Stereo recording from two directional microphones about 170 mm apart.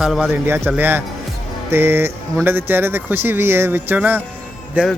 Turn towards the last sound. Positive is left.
turn(degrees=-5)  # may be behind; listen again after turning